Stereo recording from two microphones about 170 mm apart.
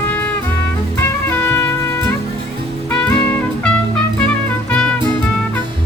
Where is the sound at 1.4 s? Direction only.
10° left (ahead or behind).